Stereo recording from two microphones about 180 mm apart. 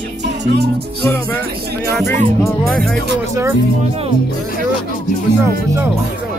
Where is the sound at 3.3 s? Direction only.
15° right (ahead or behind).